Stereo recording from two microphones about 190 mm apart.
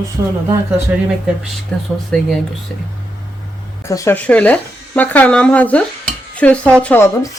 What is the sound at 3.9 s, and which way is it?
A woman's voice, 15° left (ahead or behind).